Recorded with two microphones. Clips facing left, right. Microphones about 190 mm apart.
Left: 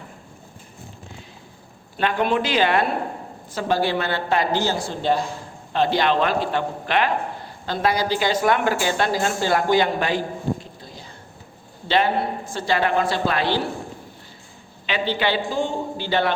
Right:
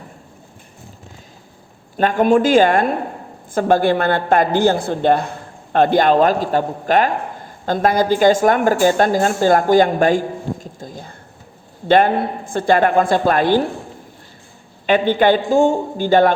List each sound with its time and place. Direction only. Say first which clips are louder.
2.0 s a woman's voice: right 7 dB; 45° right (ahead or behind)
14.8 s a woman's voice: right 9 dB; 50° right (ahead or behind)